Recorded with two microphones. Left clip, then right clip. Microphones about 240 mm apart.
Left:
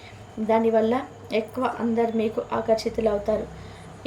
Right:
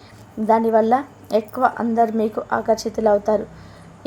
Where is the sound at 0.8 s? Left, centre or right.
Right.